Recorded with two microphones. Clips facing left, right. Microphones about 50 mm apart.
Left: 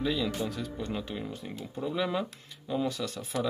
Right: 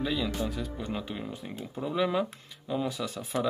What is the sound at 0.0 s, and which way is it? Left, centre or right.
Speech, centre.